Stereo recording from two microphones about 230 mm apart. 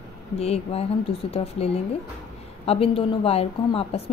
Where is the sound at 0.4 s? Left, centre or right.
Left.